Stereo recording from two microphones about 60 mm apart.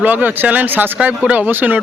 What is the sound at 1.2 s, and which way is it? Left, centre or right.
Speech, right.